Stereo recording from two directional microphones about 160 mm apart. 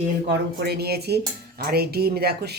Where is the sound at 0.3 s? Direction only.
90° right.